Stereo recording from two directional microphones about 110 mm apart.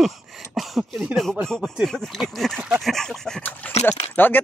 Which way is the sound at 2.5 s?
15° right (ahead or behind).